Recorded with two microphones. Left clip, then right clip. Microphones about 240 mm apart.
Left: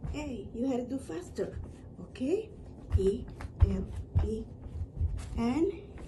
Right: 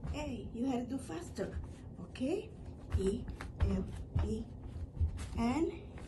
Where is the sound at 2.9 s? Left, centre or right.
Right.